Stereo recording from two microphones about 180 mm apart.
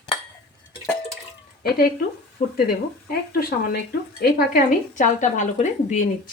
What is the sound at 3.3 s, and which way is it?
A woman's voice, 55° left (ahead or behind).